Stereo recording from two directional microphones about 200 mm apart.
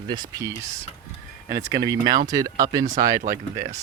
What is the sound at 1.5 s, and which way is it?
Speech, 15° right (ahead or behind).